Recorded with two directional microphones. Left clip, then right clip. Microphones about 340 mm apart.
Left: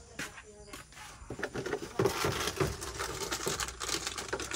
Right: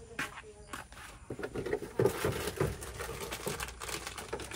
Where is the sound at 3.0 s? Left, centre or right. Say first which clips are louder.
Left 4 dB; left.